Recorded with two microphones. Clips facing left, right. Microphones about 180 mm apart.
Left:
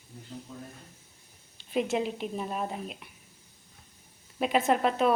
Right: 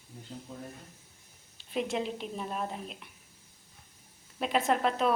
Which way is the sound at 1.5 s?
5° left (ahead or behind).